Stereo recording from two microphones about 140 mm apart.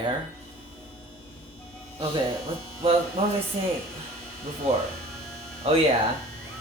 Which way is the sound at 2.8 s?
45° right (ahead or behind).